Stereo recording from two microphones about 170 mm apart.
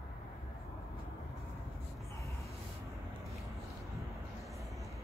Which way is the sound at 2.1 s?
20° left (ahead or behind).